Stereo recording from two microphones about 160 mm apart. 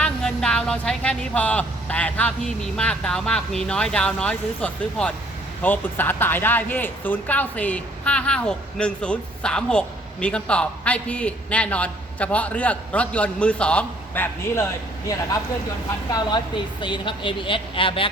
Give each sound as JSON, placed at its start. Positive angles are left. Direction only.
{"t": 0.0, "sound": "speech", "side_deg": 5}